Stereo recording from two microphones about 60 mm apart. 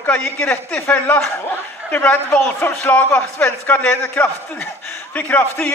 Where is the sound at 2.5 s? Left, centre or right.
Left.